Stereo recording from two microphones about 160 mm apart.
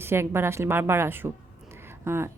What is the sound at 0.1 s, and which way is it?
Speech, 15° right (ahead or behind).